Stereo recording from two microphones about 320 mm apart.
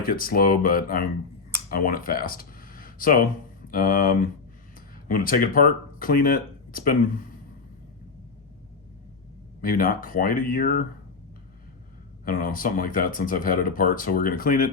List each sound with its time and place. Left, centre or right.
0.0 s speech: left
9.6 s speech: left
12.2 s speech: left